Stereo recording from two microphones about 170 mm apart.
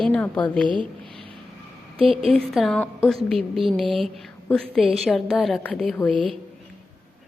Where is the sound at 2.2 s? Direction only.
Centre (ahead or behind).